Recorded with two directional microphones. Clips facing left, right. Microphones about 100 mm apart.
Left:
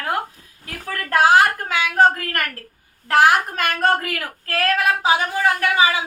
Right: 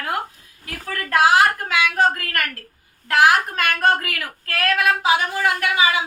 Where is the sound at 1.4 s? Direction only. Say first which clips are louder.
Right 1 dB; 35° left (ahead or behind).